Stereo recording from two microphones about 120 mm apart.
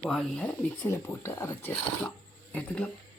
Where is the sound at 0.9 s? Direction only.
20° left (ahead or behind).